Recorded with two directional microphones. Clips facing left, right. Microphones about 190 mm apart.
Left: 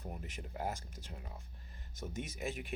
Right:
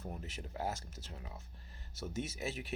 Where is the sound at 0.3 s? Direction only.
15° left (ahead or behind).